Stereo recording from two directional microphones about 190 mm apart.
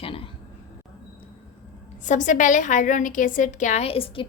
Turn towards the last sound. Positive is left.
turn(degrees=30)  # may be behind; listen again after turning